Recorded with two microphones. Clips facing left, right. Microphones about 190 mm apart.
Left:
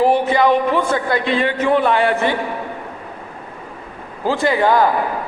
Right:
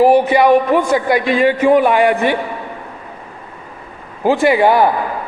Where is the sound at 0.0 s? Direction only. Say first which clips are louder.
Right 4 dB; 15° right (ahead or behind).